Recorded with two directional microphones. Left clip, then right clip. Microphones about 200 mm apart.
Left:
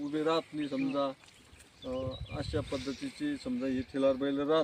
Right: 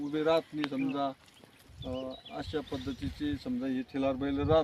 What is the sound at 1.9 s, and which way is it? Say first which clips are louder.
Speech: left 1 dB; 20° right (ahead or behind).